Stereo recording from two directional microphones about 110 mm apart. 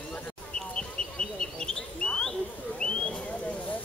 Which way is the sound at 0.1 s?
10° left (ahead or behind).